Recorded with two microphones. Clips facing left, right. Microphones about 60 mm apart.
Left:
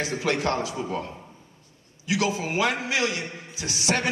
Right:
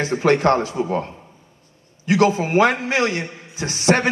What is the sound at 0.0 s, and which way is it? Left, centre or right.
A man's voice, right.